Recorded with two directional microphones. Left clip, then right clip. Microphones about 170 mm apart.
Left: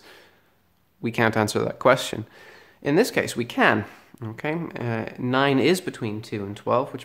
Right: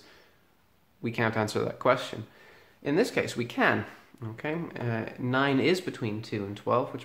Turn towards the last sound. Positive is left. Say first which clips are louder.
# left 4 dB
turn(degrees=40)  # may be behind; listen again after turning